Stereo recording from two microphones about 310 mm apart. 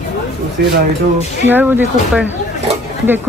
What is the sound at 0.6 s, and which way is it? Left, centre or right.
Speech, right.